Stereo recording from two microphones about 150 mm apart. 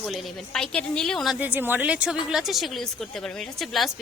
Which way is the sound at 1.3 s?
10° right (ahead or behind).